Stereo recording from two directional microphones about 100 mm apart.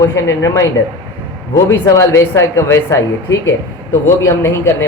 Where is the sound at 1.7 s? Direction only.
30° left (ahead or behind).